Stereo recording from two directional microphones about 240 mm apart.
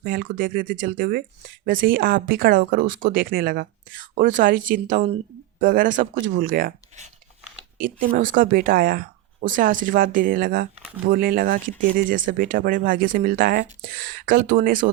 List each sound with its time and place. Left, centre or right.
0.0 s speech: right